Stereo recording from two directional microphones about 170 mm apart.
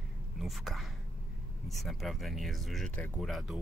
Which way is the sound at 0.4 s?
Centre (ahead or behind).